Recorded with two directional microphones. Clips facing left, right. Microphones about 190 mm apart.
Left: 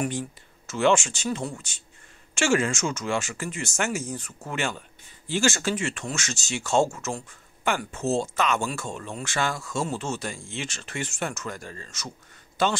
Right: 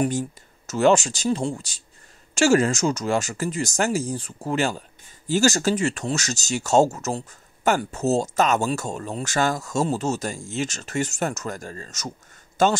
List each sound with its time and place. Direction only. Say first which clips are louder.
0.0 s a man's voice: right 5 dB; 40° right (ahead or behind)